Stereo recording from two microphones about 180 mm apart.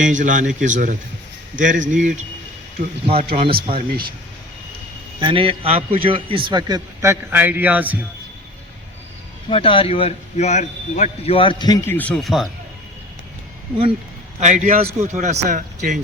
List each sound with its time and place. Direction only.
0.0 s a man's voice: 45° right (ahead or behind)
3.1 s speech: 30° right (ahead or behind)
5.2 s a man's voice: 30° right (ahead or behind); by 7.9 s 10° right (ahead or behind)
9.5 s a man's voice: 30° left (ahead or behind)
11.9 s speech: 10° left (ahead or behind)
14.4 s a man's voice: 45° right (ahead or behind)